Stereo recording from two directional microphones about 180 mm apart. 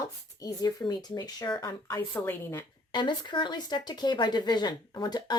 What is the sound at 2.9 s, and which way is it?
Speech, 25° left (ahead or behind).